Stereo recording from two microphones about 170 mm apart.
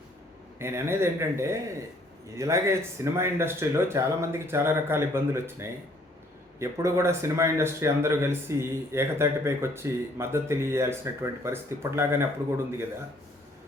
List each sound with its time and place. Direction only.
0.6 s speech: 15° right (ahead or behind)